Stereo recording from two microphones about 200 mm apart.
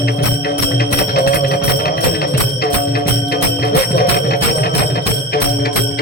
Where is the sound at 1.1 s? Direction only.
50° left (ahead or behind).